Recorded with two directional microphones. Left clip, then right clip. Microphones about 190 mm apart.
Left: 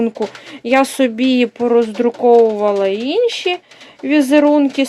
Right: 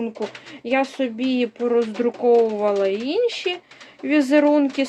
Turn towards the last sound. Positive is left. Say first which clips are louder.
# left 5 dB
turn(degrees=20)  # may be behind; listen again after turning